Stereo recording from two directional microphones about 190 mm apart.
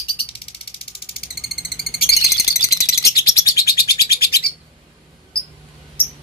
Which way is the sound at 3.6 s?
55° left (ahead or behind).